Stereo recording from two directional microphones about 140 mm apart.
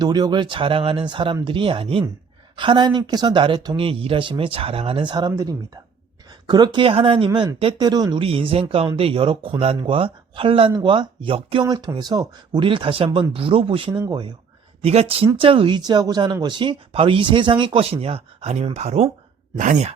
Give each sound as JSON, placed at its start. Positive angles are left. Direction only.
{"t": 0.0, "sound": "a woman's voice", "side_deg": -30}
{"t": 10.7, "sound": "a woman's voice", "side_deg": -25}
{"t": 10.9, "sound": "speech", "side_deg": -40}
{"t": 11.6, "sound": "speech", "side_deg": -30}
{"t": 19.5, "sound": "speech", "side_deg": -60}